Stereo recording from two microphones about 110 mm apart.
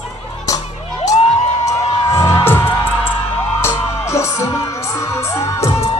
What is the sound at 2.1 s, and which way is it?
Music, 25° left (ahead or behind).